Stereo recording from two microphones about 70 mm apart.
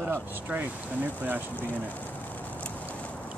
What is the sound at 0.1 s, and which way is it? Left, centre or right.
Speech, right.